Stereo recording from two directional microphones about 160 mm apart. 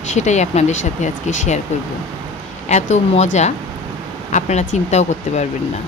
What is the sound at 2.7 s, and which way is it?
Speech, 45° left (ahead or behind).